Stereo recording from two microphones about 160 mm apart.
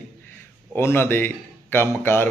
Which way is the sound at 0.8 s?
15° left (ahead or behind).